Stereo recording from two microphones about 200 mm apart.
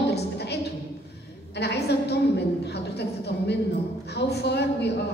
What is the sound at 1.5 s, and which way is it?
A woman's voice, 55° left (ahead or behind).